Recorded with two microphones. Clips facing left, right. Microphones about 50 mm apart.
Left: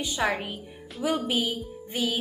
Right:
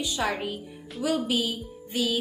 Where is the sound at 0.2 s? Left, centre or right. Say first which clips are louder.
Left 2 dB; centre.